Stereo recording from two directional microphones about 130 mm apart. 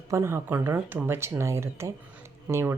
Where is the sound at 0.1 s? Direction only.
20° right (ahead or behind).